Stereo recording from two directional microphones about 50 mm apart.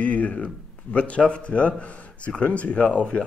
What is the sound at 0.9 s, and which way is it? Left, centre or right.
Speech, left.